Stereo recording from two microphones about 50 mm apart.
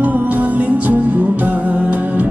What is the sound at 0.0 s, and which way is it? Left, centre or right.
Music, right.